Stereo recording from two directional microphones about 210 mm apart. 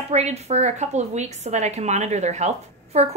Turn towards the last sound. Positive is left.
turn(degrees=-30)  # may be behind; listen again after turning